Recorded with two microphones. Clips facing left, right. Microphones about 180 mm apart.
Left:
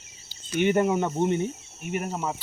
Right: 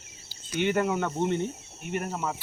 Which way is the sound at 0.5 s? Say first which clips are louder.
Left 4 dB; 15° left (ahead or behind).